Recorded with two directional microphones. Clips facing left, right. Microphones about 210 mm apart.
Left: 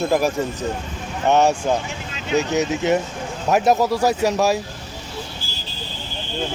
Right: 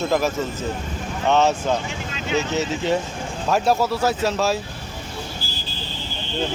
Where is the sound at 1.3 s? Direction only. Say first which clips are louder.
Left 2 dB; 15° left (ahead or behind).